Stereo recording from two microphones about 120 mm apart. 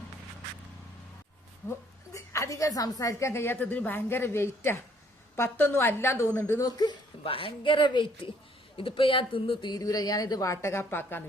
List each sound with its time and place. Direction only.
1.6 s a woman's voice: 20° left (ahead or behind)
6.6 s a woman's voice: 35° left (ahead or behind)
7.3 s a woman's voice: 45° left (ahead or behind); by 11.2 s 20° left (ahead or behind)